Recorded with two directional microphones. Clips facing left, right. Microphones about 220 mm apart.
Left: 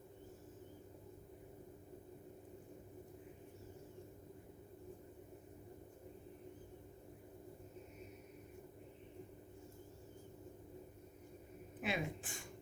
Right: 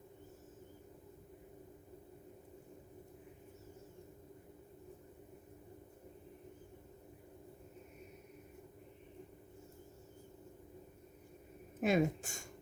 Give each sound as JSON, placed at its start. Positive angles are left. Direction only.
{"t": 11.8, "sound": "speech", "side_deg": -45}